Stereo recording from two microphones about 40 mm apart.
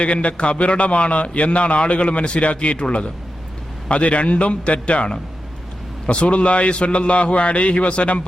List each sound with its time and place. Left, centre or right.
0.0 s a man's voice: left